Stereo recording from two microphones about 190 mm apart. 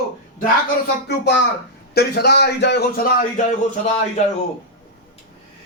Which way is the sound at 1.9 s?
60° left (ahead or behind).